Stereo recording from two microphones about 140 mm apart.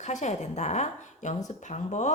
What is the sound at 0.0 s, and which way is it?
A woman's voice, 55° left (ahead or behind).